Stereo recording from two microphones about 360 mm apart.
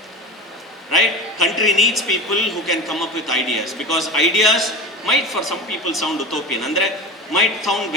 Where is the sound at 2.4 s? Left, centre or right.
Centre.